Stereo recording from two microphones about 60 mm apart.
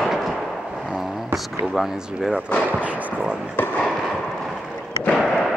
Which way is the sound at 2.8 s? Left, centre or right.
Centre.